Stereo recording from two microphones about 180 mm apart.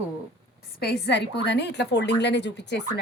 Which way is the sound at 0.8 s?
60° left (ahead or behind).